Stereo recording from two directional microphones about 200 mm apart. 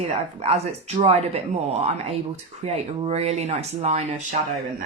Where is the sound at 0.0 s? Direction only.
30° right (ahead or behind).